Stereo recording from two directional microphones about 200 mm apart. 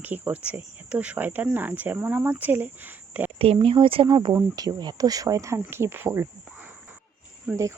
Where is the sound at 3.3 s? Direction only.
30° right (ahead or behind).